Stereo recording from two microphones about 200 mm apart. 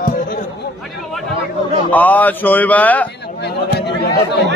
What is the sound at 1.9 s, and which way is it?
Speech, 10° left (ahead or behind).